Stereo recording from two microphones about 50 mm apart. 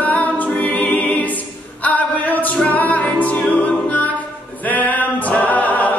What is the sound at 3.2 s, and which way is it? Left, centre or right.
Music, left.